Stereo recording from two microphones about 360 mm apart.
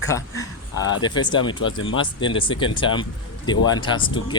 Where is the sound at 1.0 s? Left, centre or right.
Centre.